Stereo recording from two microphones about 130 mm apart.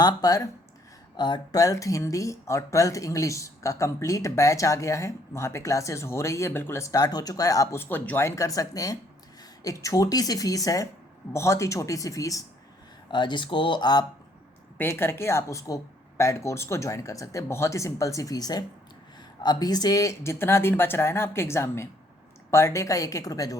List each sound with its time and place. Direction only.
0.0 s speech: 30° left (ahead or behind)
13.1 s speech: 35° left (ahead or behind)
14.8 s speech: 20° left (ahead or behind)